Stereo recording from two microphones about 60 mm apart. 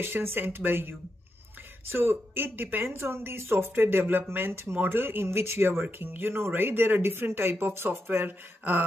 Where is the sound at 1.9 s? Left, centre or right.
Right.